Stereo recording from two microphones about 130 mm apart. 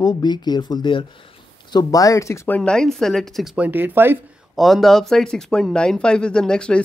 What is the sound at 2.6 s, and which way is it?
Speech, 5° left (ahead or behind).